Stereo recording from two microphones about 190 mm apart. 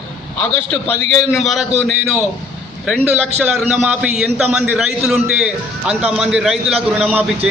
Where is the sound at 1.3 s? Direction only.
Centre (ahead or behind).